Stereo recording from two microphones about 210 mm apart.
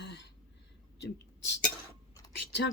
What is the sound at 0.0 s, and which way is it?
Throat clearing, 55° left (ahead or behind).